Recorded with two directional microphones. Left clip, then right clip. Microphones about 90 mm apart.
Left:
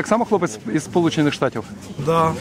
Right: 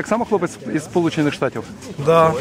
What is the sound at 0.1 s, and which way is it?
Speech, 5° left (ahead or behind).